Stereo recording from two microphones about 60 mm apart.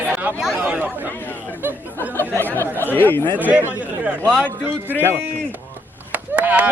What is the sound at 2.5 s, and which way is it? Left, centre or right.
Chatter, left.